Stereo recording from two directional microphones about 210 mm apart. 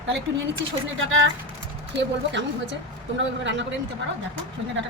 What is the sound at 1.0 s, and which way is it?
A woman's voice, 70° right (ahead or behind).